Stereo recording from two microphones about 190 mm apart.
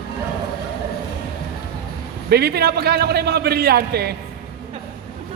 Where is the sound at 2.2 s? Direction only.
55° right (ahead or behind).